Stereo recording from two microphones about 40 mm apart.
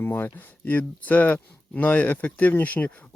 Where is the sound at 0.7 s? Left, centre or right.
Left.